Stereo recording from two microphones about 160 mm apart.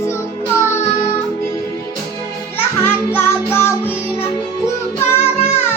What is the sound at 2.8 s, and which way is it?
Music, 15° left (ahead or behind).